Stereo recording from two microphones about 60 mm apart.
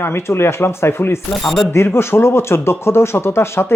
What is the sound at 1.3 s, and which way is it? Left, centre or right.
Speech, centre.